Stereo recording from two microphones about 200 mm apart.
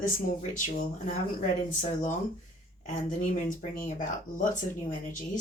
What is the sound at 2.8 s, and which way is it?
Speech, 40° left (ahead or behind).